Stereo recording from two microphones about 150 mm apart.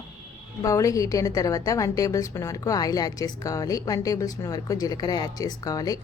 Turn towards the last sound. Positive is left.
turn(degrees=25)  # may be behind; listen again after turning